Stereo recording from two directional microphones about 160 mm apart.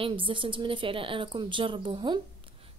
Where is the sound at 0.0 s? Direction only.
30° right (ahead or behind).